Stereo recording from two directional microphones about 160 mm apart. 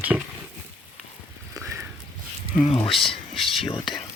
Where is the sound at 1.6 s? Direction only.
15° right (ahead or behind).